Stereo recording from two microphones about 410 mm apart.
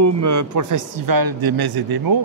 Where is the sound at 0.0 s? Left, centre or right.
Right.